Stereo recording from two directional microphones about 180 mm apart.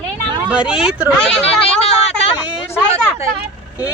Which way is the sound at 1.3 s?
35° left (ahead or behind).